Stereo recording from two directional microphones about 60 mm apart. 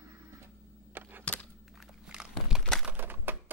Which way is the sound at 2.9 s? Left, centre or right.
Right.